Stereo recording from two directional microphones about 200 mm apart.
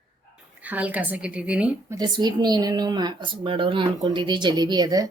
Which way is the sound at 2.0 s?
20° right (ahead or behind).